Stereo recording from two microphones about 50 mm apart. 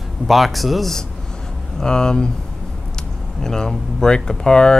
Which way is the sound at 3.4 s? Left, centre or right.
Centre.